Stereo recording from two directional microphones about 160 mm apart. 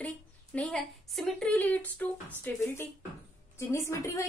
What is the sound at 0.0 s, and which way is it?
A woman's voice, 5° left (ahead or behind).